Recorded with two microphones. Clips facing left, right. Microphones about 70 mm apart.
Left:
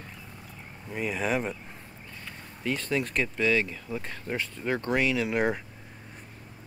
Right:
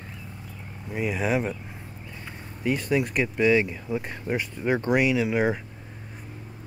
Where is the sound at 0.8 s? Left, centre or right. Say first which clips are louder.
Right 3 dB; centre.